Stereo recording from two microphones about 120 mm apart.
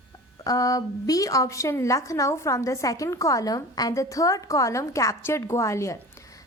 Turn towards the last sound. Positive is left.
turn(degrees=25)  # may be behind; listen again after turning